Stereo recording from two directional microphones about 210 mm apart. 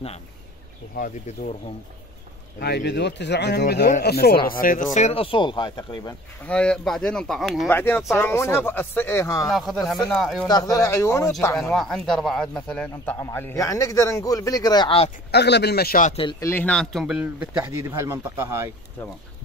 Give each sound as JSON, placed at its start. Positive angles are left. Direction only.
{"t": 0.9, "sound": "speech", "side_deg": 40}
{"t": 2.6, "sound": "a man's voice", "side_deg": 55}
{"t": 4.9, "sound": "speech", "side_deg": 30}
{"t": 6.4, "sound": "a man's voice", "side_deg": 5}
{"t": 9.5, "sound": "speech", "side_deg": 0}
{"t": 10.5, "sound": "a man's voice", "side_deg": 15}
{"t": 11.7, "sound": "a man's voice", "side_deg": 0}
{"t": 15.3, "sound": "a man's voice", "side_deg": 55}
{"t": 16.3, "sound": "a man's voice", "side_deg": 10}